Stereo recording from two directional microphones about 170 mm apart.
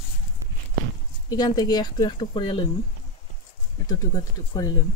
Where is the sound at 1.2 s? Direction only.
25° left (ahead or behind).